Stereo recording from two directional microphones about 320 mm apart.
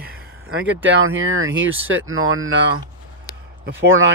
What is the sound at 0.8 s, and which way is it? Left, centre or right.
Speech, right.